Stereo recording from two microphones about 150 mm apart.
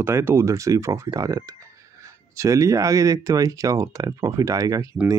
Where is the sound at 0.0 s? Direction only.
15° right (ahead or behind).